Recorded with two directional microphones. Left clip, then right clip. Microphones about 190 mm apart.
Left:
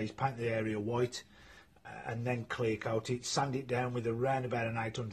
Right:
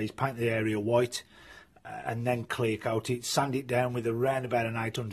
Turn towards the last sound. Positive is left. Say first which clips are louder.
# right 6 dB
turn(degrees=-55)  # may be behind; listen again after turning